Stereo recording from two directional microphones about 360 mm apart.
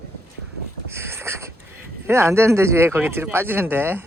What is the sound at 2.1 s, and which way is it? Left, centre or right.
Speech, centre.